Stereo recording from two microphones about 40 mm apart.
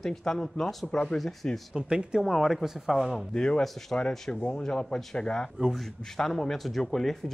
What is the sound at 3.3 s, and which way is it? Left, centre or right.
Speech, centre.